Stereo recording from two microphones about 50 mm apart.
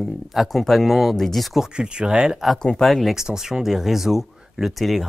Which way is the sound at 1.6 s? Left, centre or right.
Centre.